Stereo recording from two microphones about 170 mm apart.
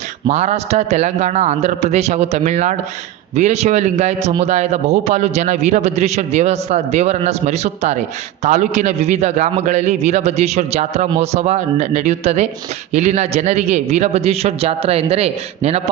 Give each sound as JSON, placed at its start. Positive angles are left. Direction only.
{"t": 0.3, "sound": "a man's voice", "side_deg": -40}